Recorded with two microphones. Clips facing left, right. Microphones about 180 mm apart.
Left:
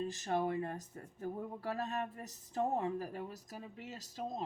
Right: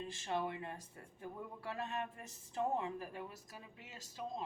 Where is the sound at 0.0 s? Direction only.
40° left (ahead or behind).